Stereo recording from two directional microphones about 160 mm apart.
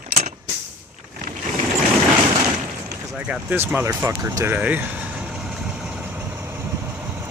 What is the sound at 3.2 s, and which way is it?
Speech, 10° right (ahead or behind).